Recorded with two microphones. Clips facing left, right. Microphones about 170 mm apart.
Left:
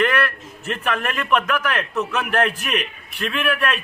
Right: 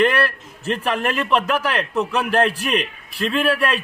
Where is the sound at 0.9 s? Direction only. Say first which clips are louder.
Right 1 dB; 30° right (ahead or behind).